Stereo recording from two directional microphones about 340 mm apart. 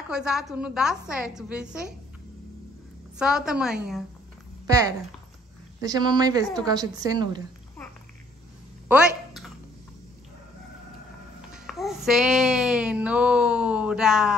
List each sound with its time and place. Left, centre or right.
0.1 s a woman's voice: centre
3.2 s a woman's voice: centre
8.8 s a sound: centre
11.5 s child singing: centre